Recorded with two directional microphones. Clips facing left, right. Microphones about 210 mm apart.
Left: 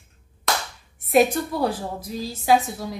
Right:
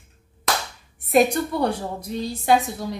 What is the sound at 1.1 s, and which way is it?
Speech, 5° left (ahead or behind).